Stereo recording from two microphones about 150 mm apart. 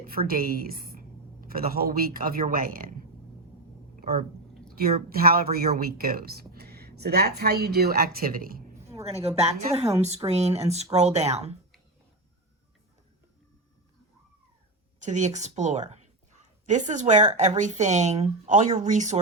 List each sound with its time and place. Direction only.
0.0 s a woman's voice: 75° right (ahead or behind)
4.0 s speech: 90° right
4.8 s speech: 80° right
9.2 s a woman's voice: 45° right (ahead or behind)
15.0 s a woman's voice: 50° right (ahead or behind)